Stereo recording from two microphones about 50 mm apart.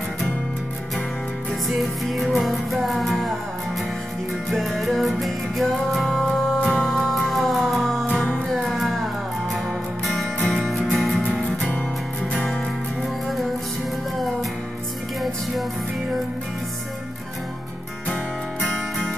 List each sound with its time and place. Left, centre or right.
1.7 s music: centre
4.5 s music: centre
6.0 s music: centre
7.1 s music: centre
8.1 s music: left
8.5 s music: centre
10.1 s music: centre
11.0 s music: centre
11.2 s music: left
18.7 s music: centre